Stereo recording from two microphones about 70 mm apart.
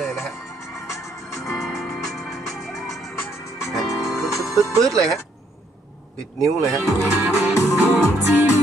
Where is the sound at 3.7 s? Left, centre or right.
Centre.